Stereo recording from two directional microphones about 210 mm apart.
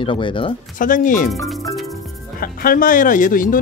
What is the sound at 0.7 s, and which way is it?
Speech, 40° left (ahead or behind).